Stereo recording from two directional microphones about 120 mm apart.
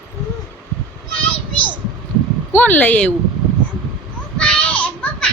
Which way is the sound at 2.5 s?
15° left (ahead or behind).